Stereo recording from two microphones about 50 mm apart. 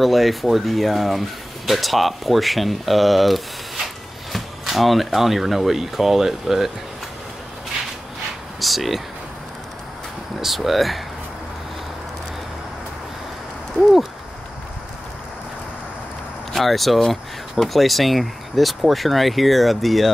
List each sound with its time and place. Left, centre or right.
0.0 s speech: centre
8.5 s a sound: centre
10.4 s speech: centre
16.5 s speech: centre